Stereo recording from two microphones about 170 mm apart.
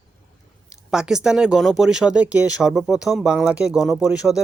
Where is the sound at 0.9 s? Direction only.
5° right (ahead or behind).